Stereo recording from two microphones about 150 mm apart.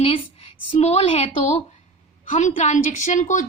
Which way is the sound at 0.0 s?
40° left (ahead or behind).